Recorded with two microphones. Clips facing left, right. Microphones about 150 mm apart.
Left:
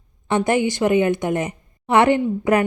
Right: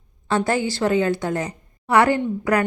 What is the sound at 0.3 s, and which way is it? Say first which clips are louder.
A woman's voice: left 2 dB; 20° left (ahead or behind).